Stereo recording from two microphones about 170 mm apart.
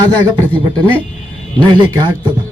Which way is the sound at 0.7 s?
10° left (ahead or behind).